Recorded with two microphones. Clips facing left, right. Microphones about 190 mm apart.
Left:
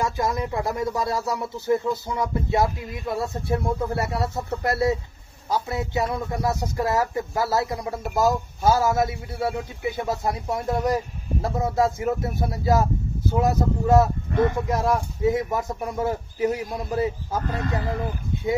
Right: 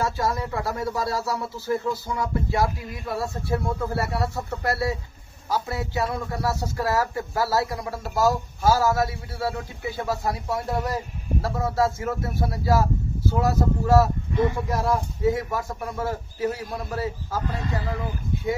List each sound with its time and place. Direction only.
0.0 s speech: 15° left (ahead or behind)